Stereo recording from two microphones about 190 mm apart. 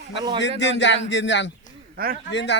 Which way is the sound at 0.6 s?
70° left (ahead or behind).